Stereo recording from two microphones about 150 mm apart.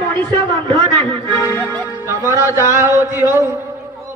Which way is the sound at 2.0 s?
20° right (ahead or behind).